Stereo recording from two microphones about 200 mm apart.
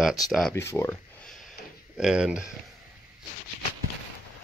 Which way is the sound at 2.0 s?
5° right (ahead or behind).